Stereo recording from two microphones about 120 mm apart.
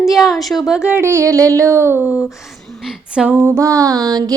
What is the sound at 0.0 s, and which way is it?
Speech, centre (ahead or behind).